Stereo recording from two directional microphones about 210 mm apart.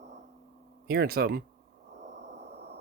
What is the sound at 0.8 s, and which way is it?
Speech, 50° right (ahead or behind).